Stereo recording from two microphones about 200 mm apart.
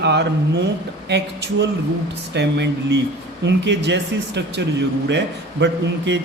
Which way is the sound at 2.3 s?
60° right (ahead or behind).